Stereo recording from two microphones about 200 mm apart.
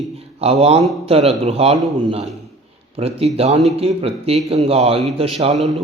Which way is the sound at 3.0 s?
30° right (ahead or behind).